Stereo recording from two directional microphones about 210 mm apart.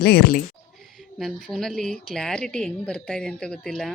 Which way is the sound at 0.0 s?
50° left (ahead or behind).